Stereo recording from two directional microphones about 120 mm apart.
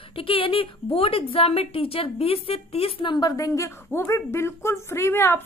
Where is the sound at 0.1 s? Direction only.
50° left (ahead or behind).